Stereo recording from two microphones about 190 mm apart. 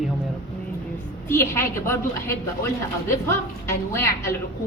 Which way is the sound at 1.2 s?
15° left (ahead or behind).